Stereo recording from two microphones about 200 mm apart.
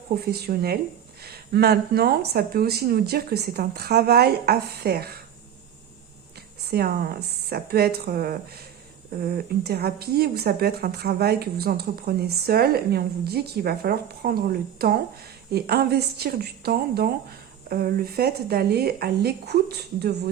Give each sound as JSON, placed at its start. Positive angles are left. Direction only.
{"t": 0.2, "sound": "speech", "side_deg": -50}
{"t": 6.7, "sound": "speech", "side_deg": -50}